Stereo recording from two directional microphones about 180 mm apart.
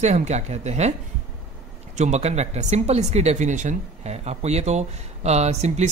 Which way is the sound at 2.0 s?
40° right (ahead or behind).